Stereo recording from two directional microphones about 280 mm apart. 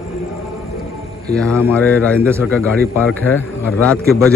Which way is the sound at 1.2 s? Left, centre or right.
Centre.